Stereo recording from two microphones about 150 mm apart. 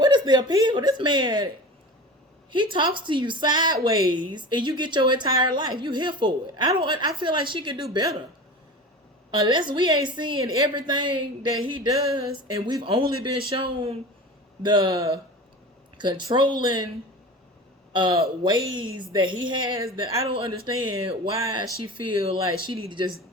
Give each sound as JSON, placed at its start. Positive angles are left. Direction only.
{"t": 0.0, "sound": "speech", "side_deg": -30}
{"t": 2.5, "sound": "a woman's voice", "side_deg": -30}
{"t": 9.5, "sound": "a woman's voice", "side_deg": -30}
{"t": 17.9, "sound": "a woman's voice", "side_deg": -30}